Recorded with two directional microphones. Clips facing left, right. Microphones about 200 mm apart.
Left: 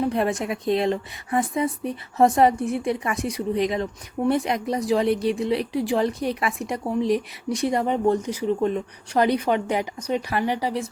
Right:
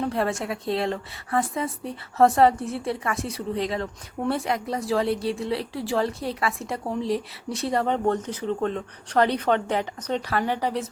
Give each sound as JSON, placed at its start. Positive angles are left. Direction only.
{"t": 0.1, "sound": "speech", "side_deg": 15}